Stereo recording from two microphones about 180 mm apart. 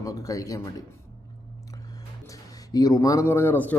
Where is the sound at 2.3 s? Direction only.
20° left (ahead or behind).